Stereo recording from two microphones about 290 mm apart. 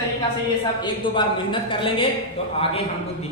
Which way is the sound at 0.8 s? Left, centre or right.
Centre.